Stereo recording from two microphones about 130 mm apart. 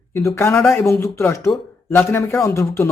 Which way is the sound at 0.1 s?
20° left (ahead or behind).